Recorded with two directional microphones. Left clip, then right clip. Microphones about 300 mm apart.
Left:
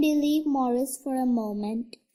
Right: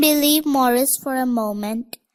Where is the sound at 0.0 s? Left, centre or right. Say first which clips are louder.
Right 7 dB; right.